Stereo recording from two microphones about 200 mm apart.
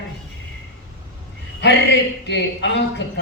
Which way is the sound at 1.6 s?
60° left (ahead or behind).